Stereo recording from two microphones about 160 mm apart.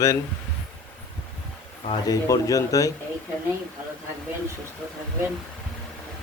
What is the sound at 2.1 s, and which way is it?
Speech, 20° left (ahead or behind).